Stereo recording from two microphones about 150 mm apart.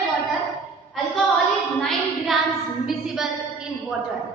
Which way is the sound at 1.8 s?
Centre (ahead or behind).